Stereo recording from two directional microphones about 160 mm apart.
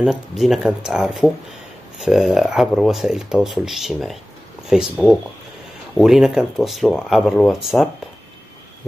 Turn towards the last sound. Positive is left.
turn(degrees=0)  # may be behind; listen again after turning